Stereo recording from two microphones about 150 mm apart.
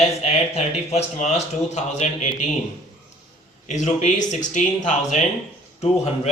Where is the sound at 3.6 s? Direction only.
50° left (ahead or behind).